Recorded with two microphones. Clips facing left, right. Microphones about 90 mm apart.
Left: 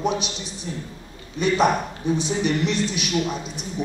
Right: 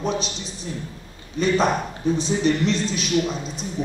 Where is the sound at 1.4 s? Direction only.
15° left (ahead or behind).